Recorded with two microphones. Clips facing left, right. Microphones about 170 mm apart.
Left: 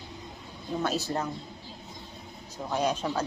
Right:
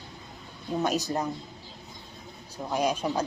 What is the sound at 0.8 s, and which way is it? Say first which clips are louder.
Speech: right 3 dB; 15° right (ahead or behind).